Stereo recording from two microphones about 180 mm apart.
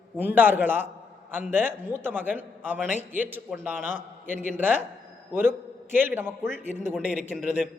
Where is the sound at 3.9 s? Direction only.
45° left (ahead or behind).